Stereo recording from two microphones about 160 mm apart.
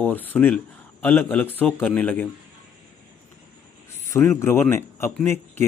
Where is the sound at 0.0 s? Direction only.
10° left (ahead or behind).